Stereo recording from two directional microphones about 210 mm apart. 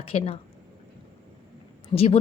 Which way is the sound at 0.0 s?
25° left (ahead or behind).